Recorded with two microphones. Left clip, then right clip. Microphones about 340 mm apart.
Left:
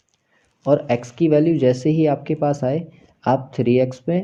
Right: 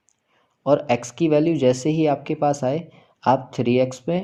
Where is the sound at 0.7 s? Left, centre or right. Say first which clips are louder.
Left 1 dB; right.